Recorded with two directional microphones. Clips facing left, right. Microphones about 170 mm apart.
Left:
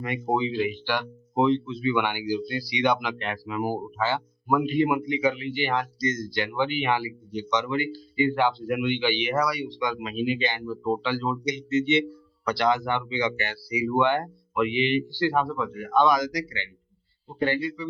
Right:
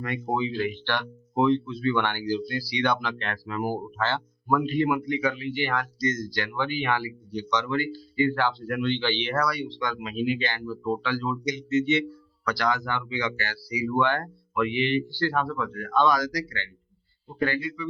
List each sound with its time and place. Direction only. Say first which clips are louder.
0.0 s speech: left 2 dB; 20° left (ahead or behind)